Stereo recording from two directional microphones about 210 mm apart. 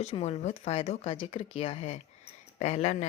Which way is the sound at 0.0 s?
30° left (ahead or behind).